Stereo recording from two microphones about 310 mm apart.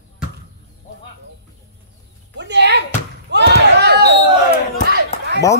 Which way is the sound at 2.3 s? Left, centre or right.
Right.